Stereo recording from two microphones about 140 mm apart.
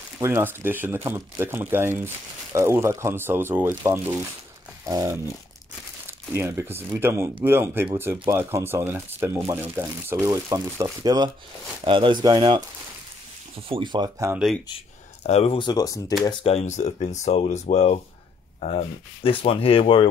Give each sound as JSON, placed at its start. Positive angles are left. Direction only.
{"t": 0.2, "sound": "speech", "side_deg": -15}
{"t": 4.8, "sound": "a sound", "side_deg": -25}
{"t": 6.0, "sound": "speech", "side_deg": -15}
{"t": 15.2, "sound": "speech", "side_deg": 50}
{"t": 15.6, "sound": "speech", "side_deg": 25}
{"t": 16.3, "sound": "speech", "side_deg": 45}